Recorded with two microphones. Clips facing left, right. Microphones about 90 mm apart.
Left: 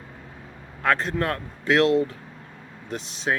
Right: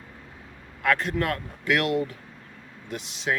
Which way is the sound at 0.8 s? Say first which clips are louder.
Left 1 dB; 30° left (ahead or behind).